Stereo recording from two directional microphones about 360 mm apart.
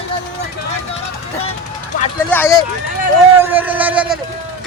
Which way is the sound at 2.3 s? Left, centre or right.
Centre.